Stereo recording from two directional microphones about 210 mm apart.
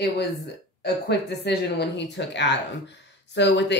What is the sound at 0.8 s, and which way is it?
Speech, 50° left (ahead or behind).